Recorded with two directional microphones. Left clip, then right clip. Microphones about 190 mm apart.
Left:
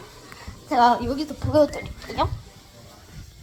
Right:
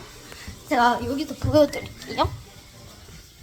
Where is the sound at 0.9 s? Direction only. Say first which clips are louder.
Left 1 dB; 25° left (ahead or behind).